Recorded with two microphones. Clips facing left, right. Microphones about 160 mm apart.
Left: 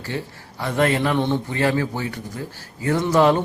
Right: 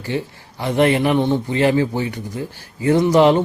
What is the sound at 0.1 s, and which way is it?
Speech, 20° right (ahead or behind).